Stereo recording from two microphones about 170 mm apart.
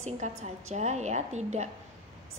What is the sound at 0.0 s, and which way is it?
Speech, 40° right (ahead or behind).